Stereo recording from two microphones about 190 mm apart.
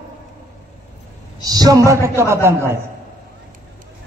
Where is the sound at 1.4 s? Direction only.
20° right (ahead or behind).